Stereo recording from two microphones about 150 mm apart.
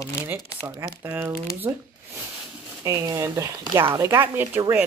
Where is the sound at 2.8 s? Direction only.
20° right (ahead or behind).